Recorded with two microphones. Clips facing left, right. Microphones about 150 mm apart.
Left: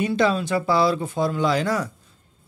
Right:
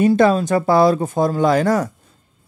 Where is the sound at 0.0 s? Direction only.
45° right (ahead or behind).